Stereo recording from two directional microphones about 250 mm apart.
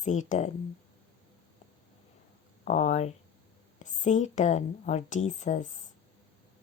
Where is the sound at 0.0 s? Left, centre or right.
Left.